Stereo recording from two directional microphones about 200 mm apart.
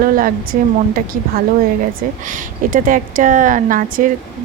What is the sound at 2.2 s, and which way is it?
Speech, 40° right (ahead or behind).